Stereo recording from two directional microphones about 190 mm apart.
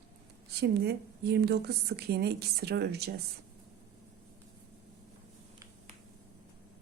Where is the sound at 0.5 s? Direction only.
60° right (ahead or behind).